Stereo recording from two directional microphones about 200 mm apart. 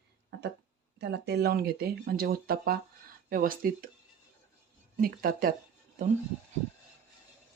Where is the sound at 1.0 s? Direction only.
55° right (ahead or behind).